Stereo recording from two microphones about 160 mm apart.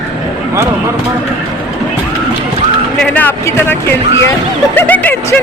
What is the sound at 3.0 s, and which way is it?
Speech, 10° left (ahead or behind).